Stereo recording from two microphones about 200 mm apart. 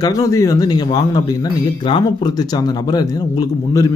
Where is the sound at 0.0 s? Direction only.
15° left (ahead or behind).